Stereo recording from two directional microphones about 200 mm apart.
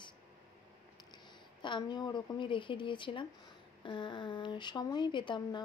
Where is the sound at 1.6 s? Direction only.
25° left (ahead or behind).